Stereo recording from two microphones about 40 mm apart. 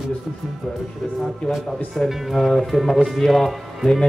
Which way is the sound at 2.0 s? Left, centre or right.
Centre.